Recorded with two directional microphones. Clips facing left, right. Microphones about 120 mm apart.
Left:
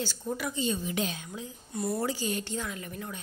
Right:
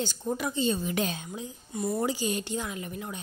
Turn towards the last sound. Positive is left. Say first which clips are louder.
# right 2 dB
turn(degrees=-20)  # may be behind; listen again after turning